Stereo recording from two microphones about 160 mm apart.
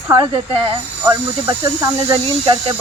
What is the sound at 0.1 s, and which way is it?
Speech, 25° right (ahead or behind).